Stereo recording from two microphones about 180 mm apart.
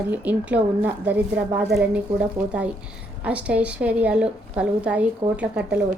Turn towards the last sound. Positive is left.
turn(degrees=-5)  # may be behind; listen again after turning